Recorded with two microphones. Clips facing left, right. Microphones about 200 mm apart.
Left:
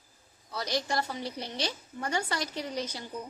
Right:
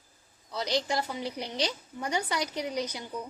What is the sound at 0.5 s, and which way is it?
A woman's voice, 20° right (ahead or behind).